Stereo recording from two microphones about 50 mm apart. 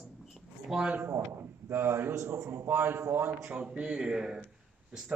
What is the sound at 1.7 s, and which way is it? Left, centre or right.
Speech, right.